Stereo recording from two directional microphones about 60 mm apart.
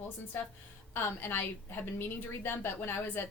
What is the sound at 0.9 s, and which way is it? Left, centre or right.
A woman's voice, left.